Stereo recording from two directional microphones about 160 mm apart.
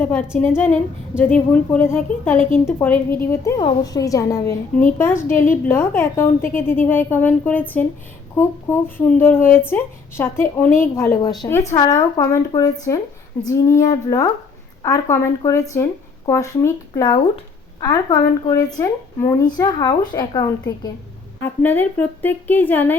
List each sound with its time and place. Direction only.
0.0 s a woman's voice: 10° left (ahead or behind)
3.6 s a woman's voice: 20° left (ahead or behind)
21.4 s a woman's voice: 10° left (ahead or behind)